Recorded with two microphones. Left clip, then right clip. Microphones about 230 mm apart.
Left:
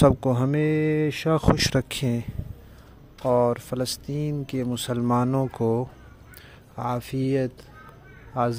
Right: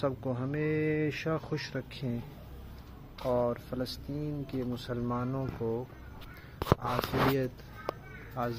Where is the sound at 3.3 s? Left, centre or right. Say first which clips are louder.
Left 9 dB; left.